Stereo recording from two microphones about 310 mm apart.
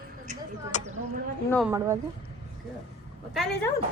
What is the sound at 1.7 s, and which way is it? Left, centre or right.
Speech, centre.